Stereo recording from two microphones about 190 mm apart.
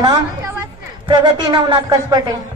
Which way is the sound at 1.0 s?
20° right (ahead or behind).